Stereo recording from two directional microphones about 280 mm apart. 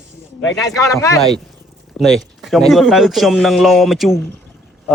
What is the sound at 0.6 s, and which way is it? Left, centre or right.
A man's voice, centre.